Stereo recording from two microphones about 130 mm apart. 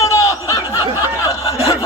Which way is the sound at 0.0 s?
25° left (ahead or behind).